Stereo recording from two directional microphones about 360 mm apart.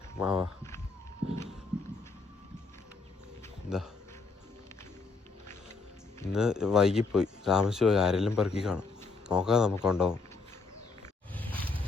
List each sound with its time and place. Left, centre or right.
0.2 s speech: centre
1.2 s walk: right
6.1 s speech: centre